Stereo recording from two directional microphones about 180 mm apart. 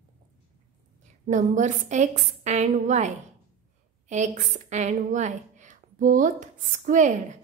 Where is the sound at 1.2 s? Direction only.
45° right (ahead or behind).